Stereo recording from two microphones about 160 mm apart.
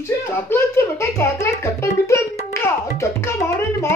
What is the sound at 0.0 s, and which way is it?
A child's voice, 15° left (ahead or behind).